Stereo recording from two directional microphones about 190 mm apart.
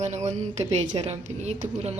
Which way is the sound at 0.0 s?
35° right (ahead or behind).